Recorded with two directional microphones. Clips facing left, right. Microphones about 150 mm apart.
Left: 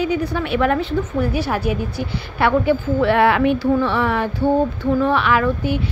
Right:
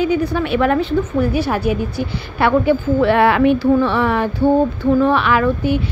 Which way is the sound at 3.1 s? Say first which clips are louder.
Right 2 dB; 35° right (ahead or behind).